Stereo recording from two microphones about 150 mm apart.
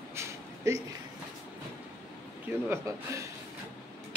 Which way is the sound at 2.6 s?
20° right (ahead or behind).